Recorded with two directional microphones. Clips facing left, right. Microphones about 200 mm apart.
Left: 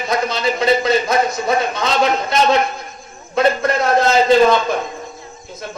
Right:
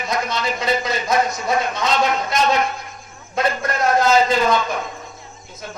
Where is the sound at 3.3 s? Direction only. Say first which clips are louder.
Left 6 dB; 30° left (ahead or behind).